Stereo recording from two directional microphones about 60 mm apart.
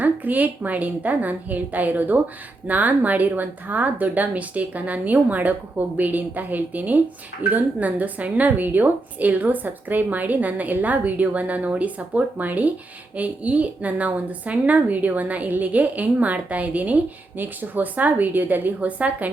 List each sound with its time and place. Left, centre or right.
0.0 s a woman's voice: right